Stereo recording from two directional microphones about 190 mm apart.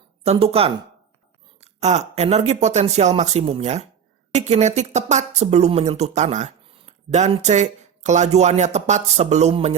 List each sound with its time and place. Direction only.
0.3 s speech: 30° right (ahead or behind)